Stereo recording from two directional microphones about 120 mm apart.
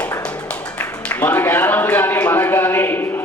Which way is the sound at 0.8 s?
15° left (ahead or behind).